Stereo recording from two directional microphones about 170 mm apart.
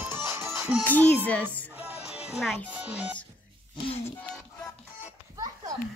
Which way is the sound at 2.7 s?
10° right (ahead or behind).